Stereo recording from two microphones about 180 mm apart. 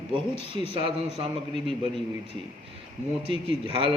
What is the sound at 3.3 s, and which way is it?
Speech, 30° right (ahead or behind).